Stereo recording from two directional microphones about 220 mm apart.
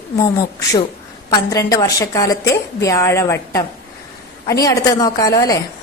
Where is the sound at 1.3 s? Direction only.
15° left (ahead or behind).